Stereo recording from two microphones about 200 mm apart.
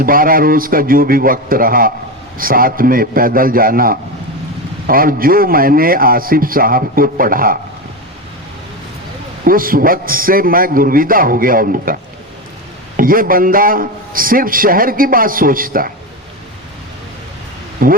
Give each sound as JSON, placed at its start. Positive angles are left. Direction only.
{"t": 0.0, "sound": "a man's voice", "side_deg": -45}
{"t": 9.4, "sound": "a man's voice", "side_deg": -45}
{"t": 13.0, "sound": "a man's voice", "side_deg": -45}
{"t": 17.8, "sound": "a man's voice", "side_deg": -45}